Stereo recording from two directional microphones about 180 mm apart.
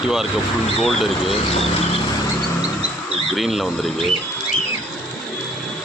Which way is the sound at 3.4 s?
Centre (ahead or behind).